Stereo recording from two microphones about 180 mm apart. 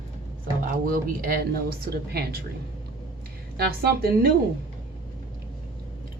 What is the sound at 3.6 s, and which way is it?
Speech, 60° right (ahead or behind).